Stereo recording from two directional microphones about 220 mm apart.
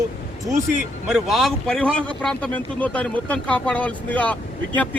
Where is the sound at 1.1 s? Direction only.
Centre (ahead or behind).